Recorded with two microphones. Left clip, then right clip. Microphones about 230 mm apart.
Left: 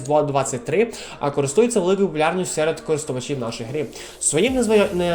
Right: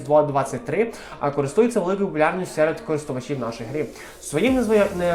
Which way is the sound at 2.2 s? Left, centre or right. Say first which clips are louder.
Even; left.